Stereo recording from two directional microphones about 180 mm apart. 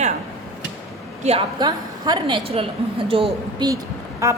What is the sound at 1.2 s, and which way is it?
A woman's voice, 30° right (ahead or behind).